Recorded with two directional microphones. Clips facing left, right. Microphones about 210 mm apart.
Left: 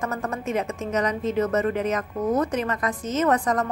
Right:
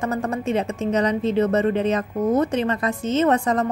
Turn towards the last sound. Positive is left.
turn(degrees=-25)  # may be behind; listen again after turning